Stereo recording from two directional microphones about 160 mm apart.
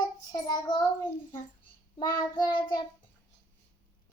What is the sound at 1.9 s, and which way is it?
Child singing, 30° left (ahead or behind).